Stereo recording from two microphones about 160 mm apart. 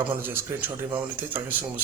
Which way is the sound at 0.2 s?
15° right (ahead or behind).